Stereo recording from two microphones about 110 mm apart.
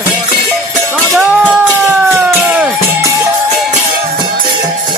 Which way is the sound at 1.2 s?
15° right (ahead or behind).